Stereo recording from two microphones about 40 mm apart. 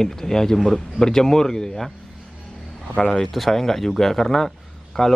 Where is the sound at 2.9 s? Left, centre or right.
Left.